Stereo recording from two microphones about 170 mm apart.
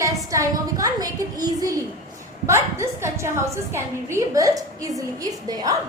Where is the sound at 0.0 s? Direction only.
20° right (ahead or behind).